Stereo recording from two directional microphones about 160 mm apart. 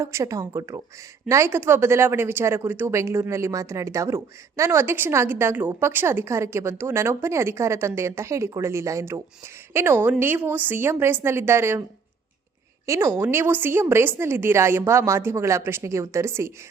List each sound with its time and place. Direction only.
0.0 s speech: 20° right (ahead or behind)
12.8 s speech: 15° right (ahead or behind)